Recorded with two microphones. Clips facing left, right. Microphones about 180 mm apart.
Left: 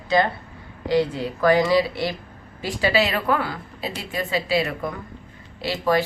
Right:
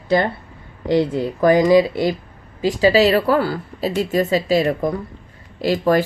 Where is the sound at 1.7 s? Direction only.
45° right (ahead or behind).